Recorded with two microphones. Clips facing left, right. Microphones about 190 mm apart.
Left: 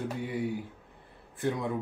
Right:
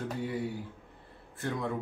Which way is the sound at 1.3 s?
15° left (ahead or behind).